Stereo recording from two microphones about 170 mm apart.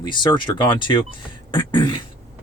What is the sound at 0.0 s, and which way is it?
Speech, 25° left (ahead or behind).